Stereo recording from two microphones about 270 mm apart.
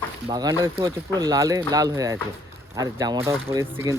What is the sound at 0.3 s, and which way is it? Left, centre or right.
Speech, centre.